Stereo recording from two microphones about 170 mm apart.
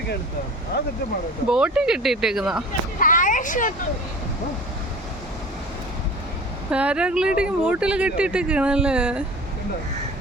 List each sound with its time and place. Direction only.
1.5 s speech: 5° right (ahead or behind)
3.0 s speech: 50° left (ahead or behind)
6.7 s speech: 5° right (ahead or behind)